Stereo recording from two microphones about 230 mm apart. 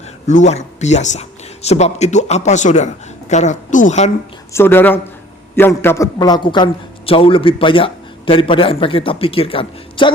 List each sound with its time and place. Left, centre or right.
0.3 s a man's voice: left
4.5 s a man's voice: centre